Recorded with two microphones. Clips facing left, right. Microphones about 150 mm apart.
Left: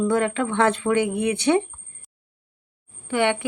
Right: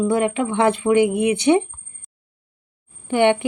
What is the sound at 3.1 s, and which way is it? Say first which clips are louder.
Speech: right 5 dB; 25° right (ahead or behind).